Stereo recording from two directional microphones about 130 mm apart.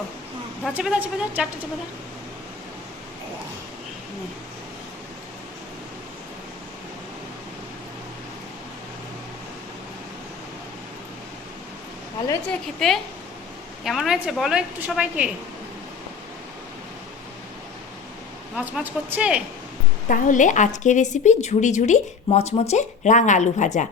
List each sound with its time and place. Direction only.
0.7 s a woman's voice: 10° right (ahead or behind)
12.8 s a woman's voice: centre (ahead or behind)
18.5 s a woman's voice: 15° right (ahead or behind)
20.1 s a woman's voice: 85° left; by 23.9 s 70° left (ahead or behind)